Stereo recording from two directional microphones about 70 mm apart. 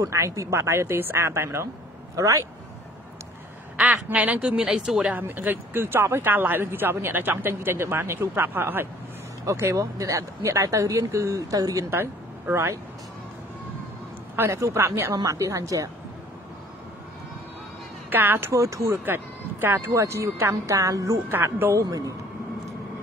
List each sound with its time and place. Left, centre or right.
0.0 s speech: right
2.1 s speech: right
3.7 s a woman's voice: centre
5.2 s speech: right
9.5 s speech: right
11.9 s speech: right
14.3 s speech: right
15.1 s speech: right
18.1 s speech: right
18.5 s speech: right
19.0 s speech: right